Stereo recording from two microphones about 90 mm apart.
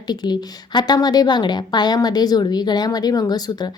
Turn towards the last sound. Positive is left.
turn(degrees=50)  # may be behind; listen again after turning